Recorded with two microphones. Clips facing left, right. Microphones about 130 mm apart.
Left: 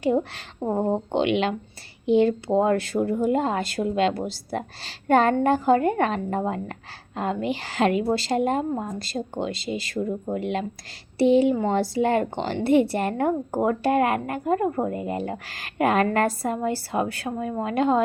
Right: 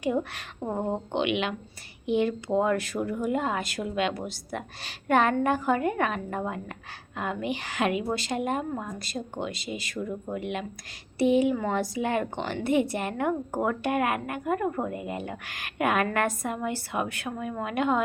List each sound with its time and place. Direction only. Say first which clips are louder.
0.0 s a woman's voice: left 5 dB; 30° left (ahead or behind)